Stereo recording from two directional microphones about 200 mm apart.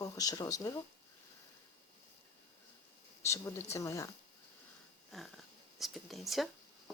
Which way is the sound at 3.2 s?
15° left (ahead or behind).